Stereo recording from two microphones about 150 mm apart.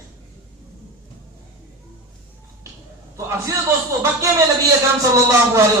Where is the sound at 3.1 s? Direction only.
20° right (ahead or behind).